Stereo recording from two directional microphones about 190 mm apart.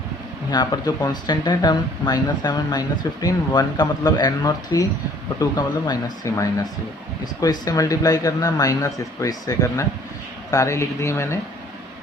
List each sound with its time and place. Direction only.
0.5 s speech: 20° left (ahead or behind)
7.4 s speech: 20° left (ahead or behind)